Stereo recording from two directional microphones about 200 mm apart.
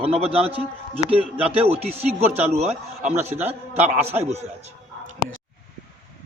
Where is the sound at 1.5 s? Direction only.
30° right (ahead or behind).